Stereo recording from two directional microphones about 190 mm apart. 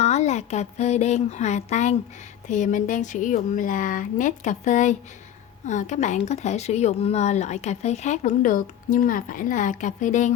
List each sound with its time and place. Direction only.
0.0 s speech: 35° left (ahead or behind)